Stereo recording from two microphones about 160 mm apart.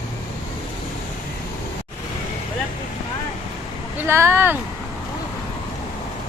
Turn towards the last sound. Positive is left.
turn(degrees=-15)  # may be behind; listen again after turning